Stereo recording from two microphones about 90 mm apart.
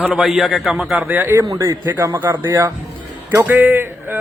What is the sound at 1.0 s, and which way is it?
Speech, 25° right (ahead or behind).